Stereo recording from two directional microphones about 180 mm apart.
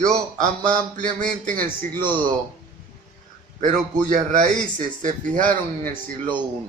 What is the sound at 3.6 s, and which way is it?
A man's voice, 45° right (ahead or behind).